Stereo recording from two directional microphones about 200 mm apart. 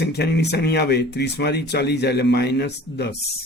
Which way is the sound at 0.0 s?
55° left (ahead or behind).